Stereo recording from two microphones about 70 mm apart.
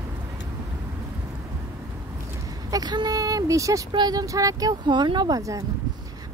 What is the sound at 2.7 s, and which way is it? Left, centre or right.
Speech, right.